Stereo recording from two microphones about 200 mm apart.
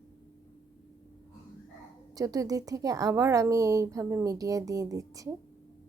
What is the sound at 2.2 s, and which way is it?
A woman's voice, 15° right (ahead or behind).